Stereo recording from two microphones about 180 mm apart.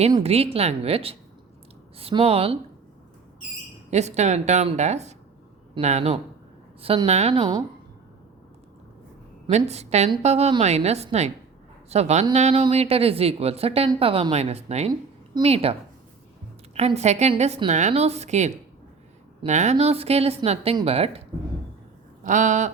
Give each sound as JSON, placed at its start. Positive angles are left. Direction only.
{"t": 0.2, "sound": "speech", "side_deg": -35}
{"t": 3.8, "sound": "speech", "side_deg": -40}
{"t": 9.5, "sound": "speech", "side_deg": -40}
{"t": 16.7, "sound": "speech", "side_deg": -35}
{"t": 22.2, "sound": "a sound", "side_deg": -45}